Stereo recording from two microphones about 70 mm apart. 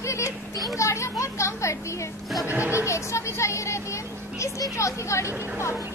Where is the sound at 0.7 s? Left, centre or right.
Left.